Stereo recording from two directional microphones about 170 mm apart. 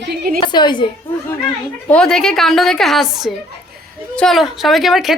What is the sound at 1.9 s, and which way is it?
Speech, 5° left (ahead or behind).